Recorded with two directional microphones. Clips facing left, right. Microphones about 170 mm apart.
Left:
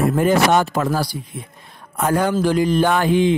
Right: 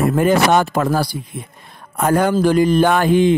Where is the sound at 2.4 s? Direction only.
50° right (ahead or behind).